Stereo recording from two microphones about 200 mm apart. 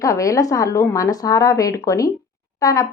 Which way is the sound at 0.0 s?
15° left (ahead or behind).